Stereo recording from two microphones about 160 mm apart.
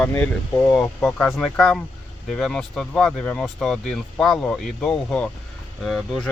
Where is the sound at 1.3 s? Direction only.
Centre (ahead or behind).